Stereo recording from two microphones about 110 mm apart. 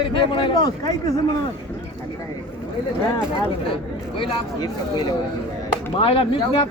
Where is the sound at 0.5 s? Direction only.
35° left (ahead or behind).